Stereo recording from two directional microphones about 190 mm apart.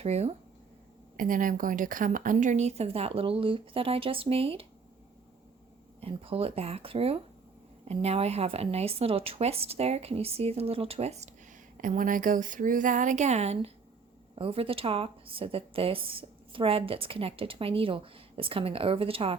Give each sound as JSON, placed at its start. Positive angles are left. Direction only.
{"t": 0.0, "sound": "speech", "side_deg": -35}
{"t": 1.1, "sound": "speech", "side_deg": -45}
{"t": 6.0, "sound": "speech", "side_deg": -30}
{"t": 11.8, "sound": "a woman's voice", "side_deg": -45}